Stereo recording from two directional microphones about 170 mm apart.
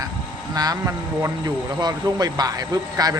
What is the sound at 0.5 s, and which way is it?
A man's voice, 20° right (ahead or behind).